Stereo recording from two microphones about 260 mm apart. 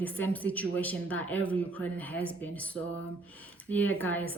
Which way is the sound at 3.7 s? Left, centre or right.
Centre.